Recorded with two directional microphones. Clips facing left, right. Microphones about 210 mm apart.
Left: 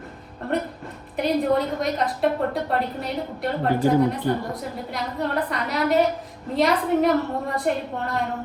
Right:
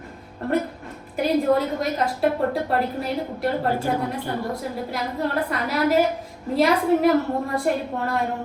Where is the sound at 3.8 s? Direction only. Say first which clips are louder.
Left 6 dB; 20° left (ahead or behind).